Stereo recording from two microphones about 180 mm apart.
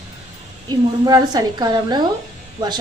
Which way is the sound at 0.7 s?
20° right (ahead or behind).